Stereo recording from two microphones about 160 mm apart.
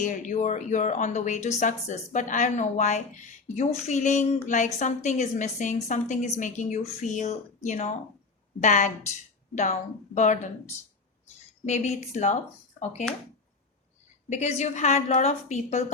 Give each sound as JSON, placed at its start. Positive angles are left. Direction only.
{"t": 0.0, "sound": "a woman's voice", "side_deg": 50}
{"t": 14.3, "sound": "a woman's voice", "side_deg": 45}